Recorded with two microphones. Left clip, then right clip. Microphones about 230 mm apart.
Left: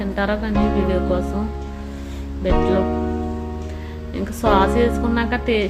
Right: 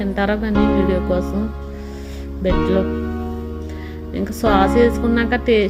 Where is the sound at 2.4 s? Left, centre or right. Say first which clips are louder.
Right 1 dB; centre.